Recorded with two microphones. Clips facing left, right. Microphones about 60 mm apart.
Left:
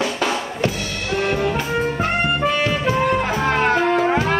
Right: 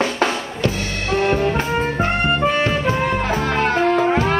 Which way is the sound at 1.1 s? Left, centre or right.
Right.